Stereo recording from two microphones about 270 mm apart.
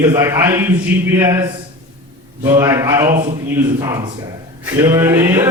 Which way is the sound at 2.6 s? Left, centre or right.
Centre.